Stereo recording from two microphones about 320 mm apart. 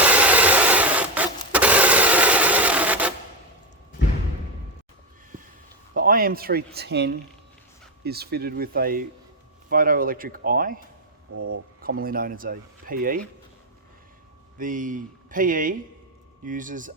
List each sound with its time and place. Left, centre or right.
0.0 s a sound: centre
5.9 s speech: right
11.3 s speech: right
11.8 s speech: right
14.6 s speech: right